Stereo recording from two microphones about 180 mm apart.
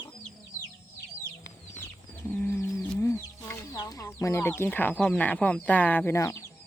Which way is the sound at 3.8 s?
20° left (ahead or behind).